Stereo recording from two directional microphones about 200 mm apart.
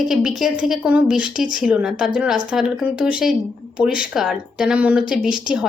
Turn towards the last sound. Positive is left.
turn(degrees=-5)  # may be behind; listen again after turning